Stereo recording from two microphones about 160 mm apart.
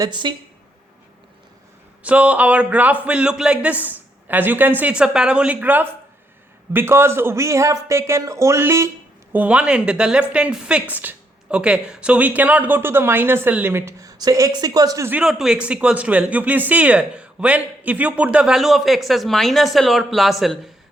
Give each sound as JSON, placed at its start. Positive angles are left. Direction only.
{"t": 0.0, "sound": "speech", "side_deg": -30}
{"t": 2.0, "sound": "a woman's voice", "side_deg": -5}
{"t": 15.2, "sound": "speech", "side_deg": -5}